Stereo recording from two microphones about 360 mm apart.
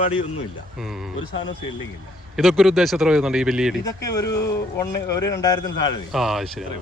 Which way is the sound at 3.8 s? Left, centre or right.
Centre.